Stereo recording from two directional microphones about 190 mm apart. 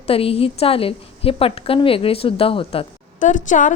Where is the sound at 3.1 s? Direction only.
40° left (ahead or behind).